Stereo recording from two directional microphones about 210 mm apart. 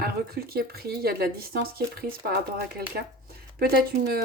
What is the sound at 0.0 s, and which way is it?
Speech, 45° right (ahead or behind).